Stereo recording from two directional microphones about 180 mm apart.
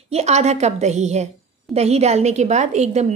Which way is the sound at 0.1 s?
40° right (ahead or behind).